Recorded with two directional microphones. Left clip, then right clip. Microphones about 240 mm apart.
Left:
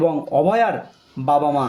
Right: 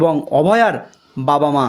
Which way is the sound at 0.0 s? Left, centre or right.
Right.